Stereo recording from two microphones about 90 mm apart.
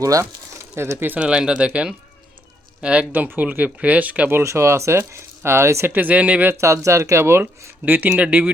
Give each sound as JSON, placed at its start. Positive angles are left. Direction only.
{"t": 0.0, "sound": "speech", "side_deg": -40}
{"t": 0.8, "sound": "speech", "side_deg": -30}
{"t": 6.6, "sound": "speech", "side_deg": -35}